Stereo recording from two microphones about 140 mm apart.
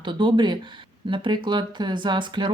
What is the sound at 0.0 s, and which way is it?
Speech, 35° right (ahead or behind).